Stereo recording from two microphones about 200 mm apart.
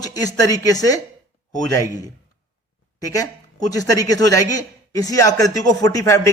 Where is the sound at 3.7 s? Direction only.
20° left (ahead or behind).